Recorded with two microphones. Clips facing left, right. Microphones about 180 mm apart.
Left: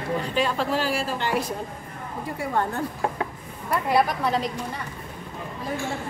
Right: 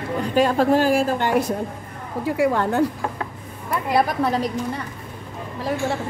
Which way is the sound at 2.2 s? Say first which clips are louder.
Right 7 dB; 90° right.